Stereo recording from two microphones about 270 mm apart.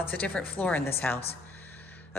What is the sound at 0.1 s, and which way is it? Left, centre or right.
A woman's voice, centre.